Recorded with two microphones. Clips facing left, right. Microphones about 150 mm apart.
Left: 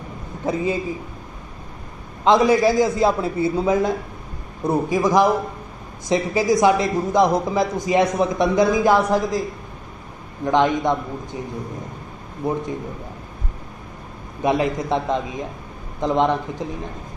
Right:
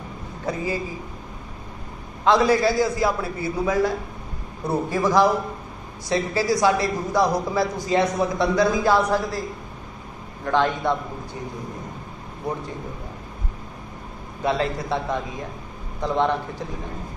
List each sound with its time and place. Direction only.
0.5 s a man's voice: 20° left (ahead or behind)
2.2 s a man's voice: 20° left (ahead or behind)
10.4 s a man's voice: 20° left (ahead or behind)
12.4 s a man's voice: 25° left (ahead or behind)
14.4 s a man's voice: 15° left (ahead or behind)